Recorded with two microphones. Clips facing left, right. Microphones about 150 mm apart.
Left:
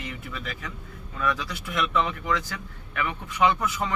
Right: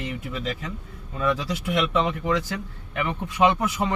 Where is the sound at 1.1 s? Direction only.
25° right (ahead or behind).